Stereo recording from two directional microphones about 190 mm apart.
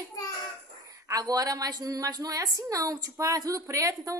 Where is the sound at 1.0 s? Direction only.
20° right (ahead or behind).